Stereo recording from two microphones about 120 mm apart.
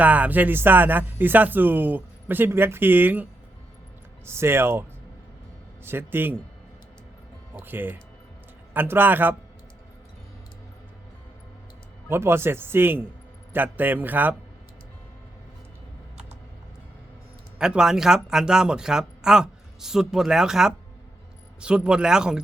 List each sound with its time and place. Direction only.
0.0 s speech: 10° right (ahead or behind)
4.3 s a man's voice: 20° right (ahead or behind)
7.5 s speech: 15° right (ahead or behind)
12.0 s a man's voice: 20° right (ahead or behind)
17.6 s speech: 5° right (ahead or behind)